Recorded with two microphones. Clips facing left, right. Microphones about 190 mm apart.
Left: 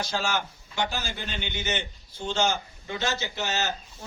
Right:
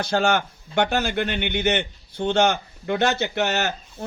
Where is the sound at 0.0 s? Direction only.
60° right (ahead or behind).